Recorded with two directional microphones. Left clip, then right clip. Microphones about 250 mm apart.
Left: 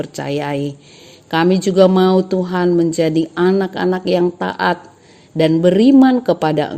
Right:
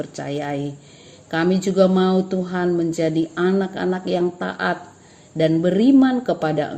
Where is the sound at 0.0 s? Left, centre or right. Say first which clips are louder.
Left 5 dB; left.